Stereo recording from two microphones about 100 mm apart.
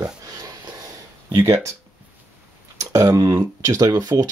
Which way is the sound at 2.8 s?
35° right (ahead or behind).